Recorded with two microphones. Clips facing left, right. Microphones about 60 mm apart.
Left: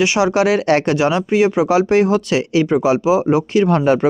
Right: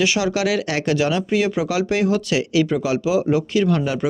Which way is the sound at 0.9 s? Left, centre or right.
Left.